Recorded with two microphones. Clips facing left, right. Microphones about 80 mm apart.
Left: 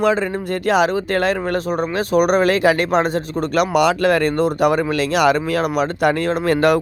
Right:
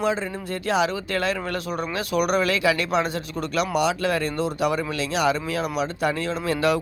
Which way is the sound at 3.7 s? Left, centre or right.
Left.